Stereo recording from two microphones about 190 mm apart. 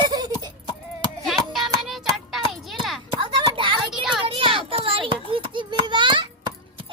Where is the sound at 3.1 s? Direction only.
25° right (ahead or behind).